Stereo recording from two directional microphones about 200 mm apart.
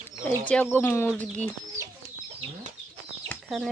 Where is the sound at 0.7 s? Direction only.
10° left (ahead or behind).